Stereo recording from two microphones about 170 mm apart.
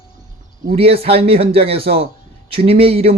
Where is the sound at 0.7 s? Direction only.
35° right (ahead or behind).